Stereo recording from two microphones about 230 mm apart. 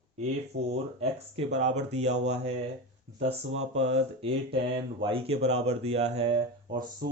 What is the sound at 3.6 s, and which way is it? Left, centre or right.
Speech, right.